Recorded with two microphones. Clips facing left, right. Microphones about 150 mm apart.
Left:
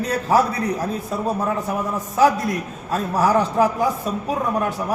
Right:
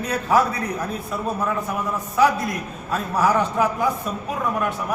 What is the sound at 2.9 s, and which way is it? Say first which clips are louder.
A man's voice: left 1 dB; 40° left (ahead or behind).